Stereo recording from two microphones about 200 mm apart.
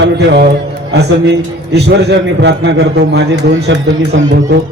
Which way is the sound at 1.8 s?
55° right (ahead or behind).